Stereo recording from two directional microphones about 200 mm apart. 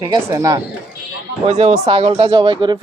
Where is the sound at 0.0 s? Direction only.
20° right (ahead or behind).